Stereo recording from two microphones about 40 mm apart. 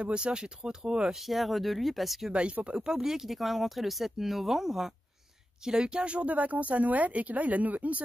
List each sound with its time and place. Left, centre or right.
0.0 s speech: right
1.2 s speech: centre
2.6 s speech: centre; by 8.0 s right